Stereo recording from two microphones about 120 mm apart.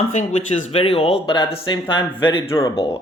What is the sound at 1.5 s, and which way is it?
Speech, 40° left (ahead or behind).